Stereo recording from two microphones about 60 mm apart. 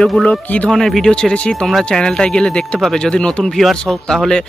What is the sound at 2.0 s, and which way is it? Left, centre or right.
A man's voice, centre.